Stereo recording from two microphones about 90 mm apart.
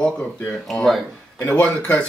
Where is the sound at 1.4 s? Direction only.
15° left (ahead or behind).